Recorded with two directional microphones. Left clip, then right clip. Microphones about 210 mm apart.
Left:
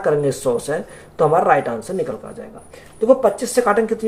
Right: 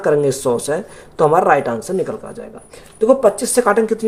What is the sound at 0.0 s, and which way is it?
Speech, 40° right (ahead or behind).